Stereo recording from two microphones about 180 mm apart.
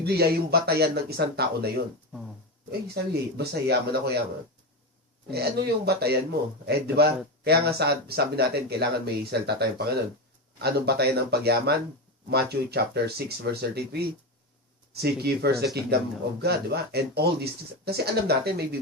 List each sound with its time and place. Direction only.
0.0 s speech: 60° right (ahead or behind)
2.8 s speech: 65° right (ahead or behind)
5.3 s speech: 65° right (ahead or behind)